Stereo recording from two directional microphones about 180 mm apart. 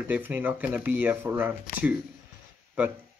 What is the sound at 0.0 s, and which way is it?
Speech, 10° right (ahead or behind).